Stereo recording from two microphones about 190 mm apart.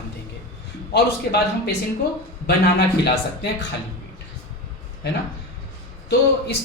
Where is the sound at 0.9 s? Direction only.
60° left (ahead or behind).